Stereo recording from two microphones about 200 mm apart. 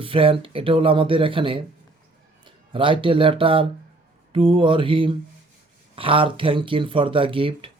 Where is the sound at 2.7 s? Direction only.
25° right (ahead or behind).